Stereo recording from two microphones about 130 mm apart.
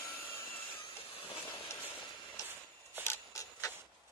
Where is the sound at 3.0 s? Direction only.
20° left (ahead or behind).